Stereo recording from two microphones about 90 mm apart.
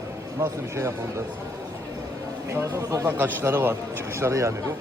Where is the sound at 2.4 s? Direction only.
35° right (ahead or behind).